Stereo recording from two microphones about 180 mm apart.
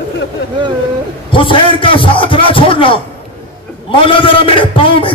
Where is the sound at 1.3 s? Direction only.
30° left (ahead or behind).